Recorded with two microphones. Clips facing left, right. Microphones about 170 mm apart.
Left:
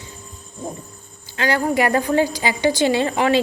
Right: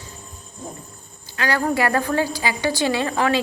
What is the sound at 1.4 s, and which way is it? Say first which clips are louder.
A woman's voice: left 2 dB; 20° left (ahead or behind).